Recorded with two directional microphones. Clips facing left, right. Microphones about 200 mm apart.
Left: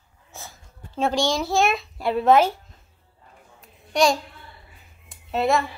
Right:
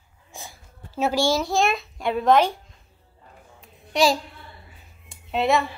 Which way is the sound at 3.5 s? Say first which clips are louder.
Left 1 dB; centre (ahead or behind).